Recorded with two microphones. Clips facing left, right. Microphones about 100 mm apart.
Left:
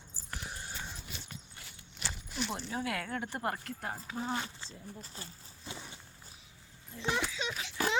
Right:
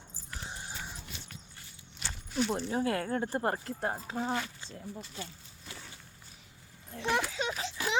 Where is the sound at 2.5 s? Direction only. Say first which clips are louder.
Right 4 dB; 35° right (ahead or behind).